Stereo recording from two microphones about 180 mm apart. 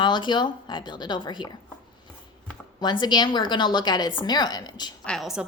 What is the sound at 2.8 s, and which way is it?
A woman's voice, 25° left (ahead or behind).